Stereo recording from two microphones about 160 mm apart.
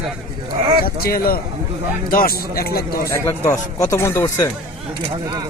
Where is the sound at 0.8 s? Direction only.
65° left (ahead or behind).